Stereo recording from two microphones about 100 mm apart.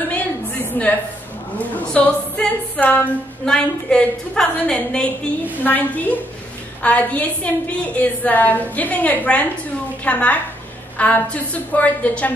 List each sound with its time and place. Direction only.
0.8 s a woman's voice: 20° left (ahead or behind)